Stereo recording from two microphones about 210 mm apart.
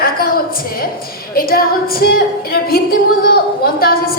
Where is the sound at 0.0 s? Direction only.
45° left (ahead or behind).